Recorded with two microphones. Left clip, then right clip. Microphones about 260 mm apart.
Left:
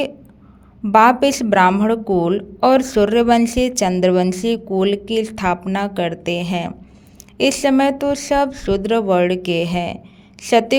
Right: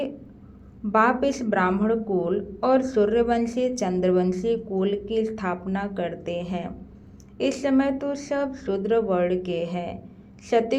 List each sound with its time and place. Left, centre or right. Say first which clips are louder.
0.9 s a woman's voice: left 9 dB; left